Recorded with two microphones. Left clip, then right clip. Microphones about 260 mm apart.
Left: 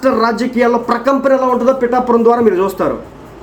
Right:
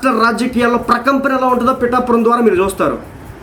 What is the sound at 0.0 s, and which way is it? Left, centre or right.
Speech, centre.